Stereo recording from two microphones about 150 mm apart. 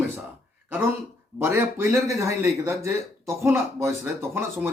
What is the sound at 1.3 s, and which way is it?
Speech, 15° right (ahead or behind).